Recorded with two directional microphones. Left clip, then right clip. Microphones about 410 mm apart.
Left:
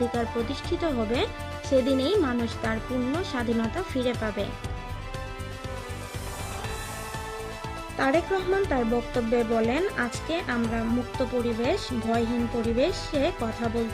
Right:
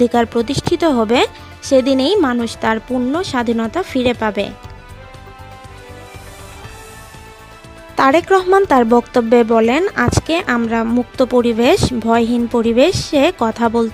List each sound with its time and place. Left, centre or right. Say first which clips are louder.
0.1 s speech: right 13 dB; right
7.9 s speech: right 13 dB; right